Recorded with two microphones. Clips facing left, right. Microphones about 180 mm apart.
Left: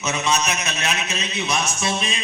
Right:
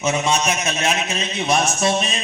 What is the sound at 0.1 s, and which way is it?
A man's voice, 35° right (ahead or behind).